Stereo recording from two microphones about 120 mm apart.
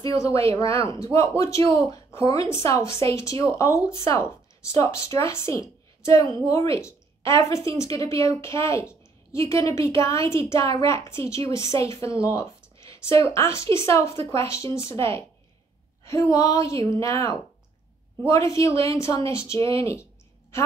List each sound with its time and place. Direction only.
0.0 s a woman's voice: 25° left (ahead or behind)
12.4 s a sound: 25° left (ahead or behind)
13.3 s a woman's voice: 25° left (ahead or behind)